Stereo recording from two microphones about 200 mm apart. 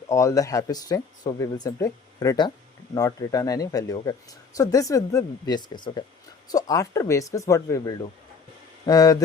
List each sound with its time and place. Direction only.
0.1 s speech: 15° left (ahead or behind)